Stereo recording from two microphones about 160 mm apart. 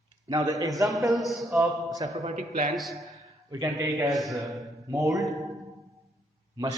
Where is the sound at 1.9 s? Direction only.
20° right (ahead or behind).